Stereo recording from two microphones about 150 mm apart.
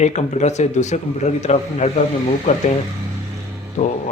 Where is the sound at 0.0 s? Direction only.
50° left (ahead or behind).